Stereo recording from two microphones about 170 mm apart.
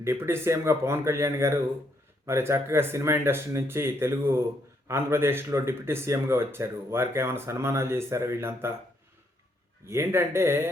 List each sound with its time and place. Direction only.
0.0 s speech: 15° right (ahead or behind)
9.8 s speech: 15° right (ahead or behind)